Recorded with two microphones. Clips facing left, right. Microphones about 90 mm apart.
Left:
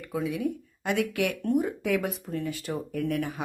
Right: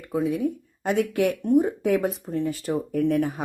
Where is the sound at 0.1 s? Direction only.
30° right (ahead or behind).